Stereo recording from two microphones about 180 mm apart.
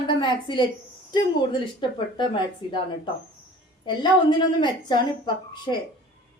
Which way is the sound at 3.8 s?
25° left (ahead or behind).